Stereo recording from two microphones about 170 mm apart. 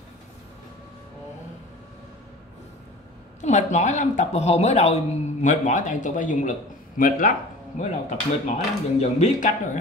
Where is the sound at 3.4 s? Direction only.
45° left (ahead or behind).